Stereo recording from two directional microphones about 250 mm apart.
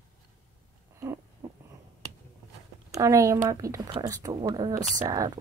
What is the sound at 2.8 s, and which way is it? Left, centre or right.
Speech, centre.